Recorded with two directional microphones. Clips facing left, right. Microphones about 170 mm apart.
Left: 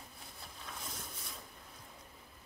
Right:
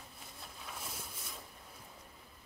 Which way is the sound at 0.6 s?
5° right (ahead or behind).